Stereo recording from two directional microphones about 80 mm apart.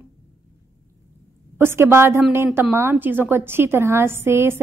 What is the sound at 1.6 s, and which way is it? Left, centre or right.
A woman's voice, right.